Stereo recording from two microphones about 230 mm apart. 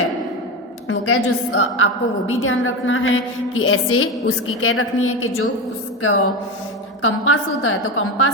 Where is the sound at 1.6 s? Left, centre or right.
Left.